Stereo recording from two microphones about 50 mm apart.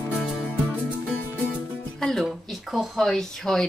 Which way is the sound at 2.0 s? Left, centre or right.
Centre.